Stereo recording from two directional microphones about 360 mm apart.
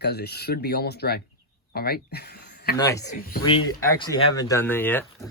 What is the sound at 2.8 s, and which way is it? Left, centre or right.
Speech, centre.